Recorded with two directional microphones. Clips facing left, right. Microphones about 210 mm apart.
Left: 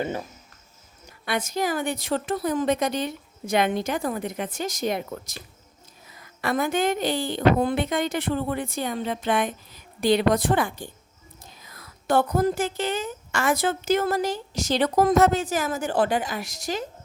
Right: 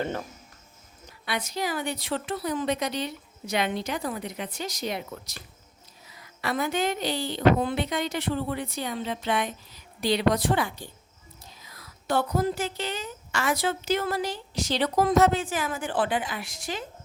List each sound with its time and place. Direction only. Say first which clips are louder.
1.2 s a woman's voice: left 4 dB; 50° left (ahead or behind)